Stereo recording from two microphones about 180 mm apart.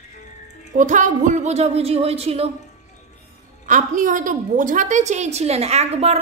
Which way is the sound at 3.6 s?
45° right (ahead or behind).